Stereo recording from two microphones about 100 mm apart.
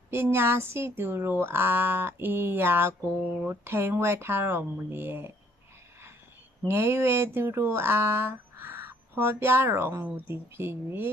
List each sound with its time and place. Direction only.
0.1 s speech: 25° right (ahead or behind)
6.7 s speech: 25° right (ahead or behind)